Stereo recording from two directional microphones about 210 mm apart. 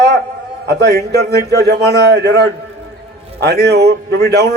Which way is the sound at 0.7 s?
50° right (ahead or behind).